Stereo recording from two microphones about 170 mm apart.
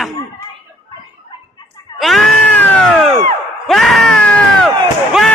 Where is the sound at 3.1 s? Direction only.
40° right (ahead or behind).